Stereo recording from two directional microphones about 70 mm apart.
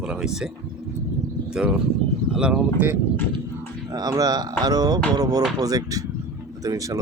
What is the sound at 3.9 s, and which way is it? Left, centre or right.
Speech, right.